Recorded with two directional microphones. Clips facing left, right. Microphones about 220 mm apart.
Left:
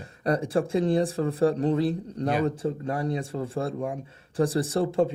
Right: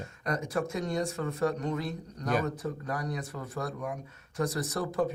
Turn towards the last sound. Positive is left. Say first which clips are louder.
# left 6 dB
turn(degrees=25)  # may be behind; listen again after turning